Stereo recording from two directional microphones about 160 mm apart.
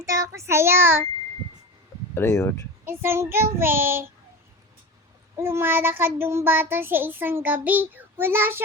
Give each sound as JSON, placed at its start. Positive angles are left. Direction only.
{"t": 0.0, "sound": "child singing", "side_deg": -20}
{"t": 2.1, "sound": "speech", "side_deg": 15}
{"t": 2.8, "sound": "child singing", "side_deg": -15}
{"t": 5.4, "sound": "child singing", "side_deg": -15}